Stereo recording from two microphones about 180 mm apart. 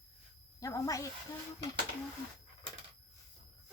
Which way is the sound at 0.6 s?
20° left (ahead or behind).